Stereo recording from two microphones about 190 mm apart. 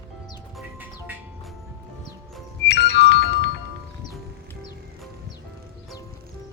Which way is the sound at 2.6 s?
65° left (ahead or behind).